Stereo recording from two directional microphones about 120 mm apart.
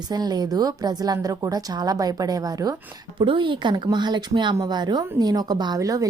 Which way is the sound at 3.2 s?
40° right (ahead or behind).